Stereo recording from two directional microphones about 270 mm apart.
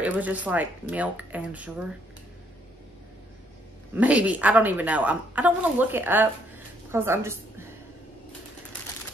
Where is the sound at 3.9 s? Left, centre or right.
Centre.